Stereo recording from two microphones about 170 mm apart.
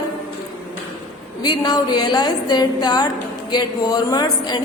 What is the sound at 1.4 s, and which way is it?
A woman's voice, 25° left (ahead or behind).